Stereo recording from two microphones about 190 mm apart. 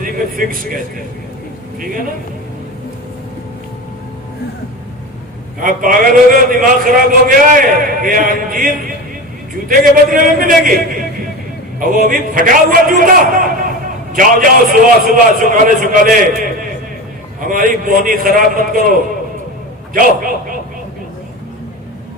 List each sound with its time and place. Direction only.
0.0 s speech: 45° right (ahead or behind)
5.5 s a man's voice: 45° right (ahead or behind)
11.8 s a man's voice: 45° right (ahead or behind)